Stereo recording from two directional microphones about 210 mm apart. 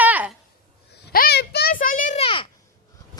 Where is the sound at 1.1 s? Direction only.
45° left (ahead or behind).